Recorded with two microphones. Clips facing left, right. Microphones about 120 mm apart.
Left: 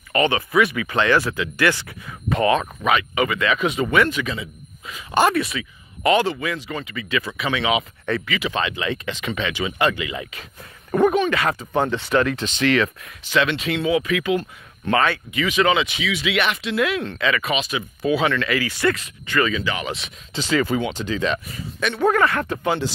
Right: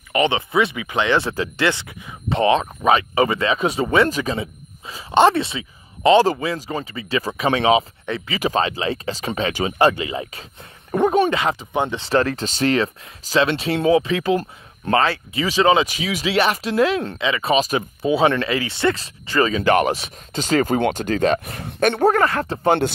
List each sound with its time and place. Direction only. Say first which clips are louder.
0.1 s a man's voice: even; 20° right (ahead or behind)
10.9 s speech: right 1 dB; 20° right (ahead or behind)
12.1 s a man's voice: right 1 dB; 35° right (ahead or behind)
18.0 s speech: right 2 dB; 30° right (ahead or behind)
19.6 s a woman's voice: right 10 dB; 50° right (ahead or behind)
22.1 s a man's voice: right 1 dB; 30° right (ahead or behind)
22.7 s a woman's voice: right 6 dB; 60° right (ahead or behind)